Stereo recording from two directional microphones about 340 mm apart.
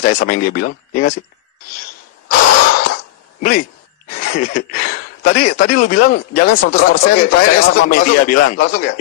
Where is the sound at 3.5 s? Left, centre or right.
Left.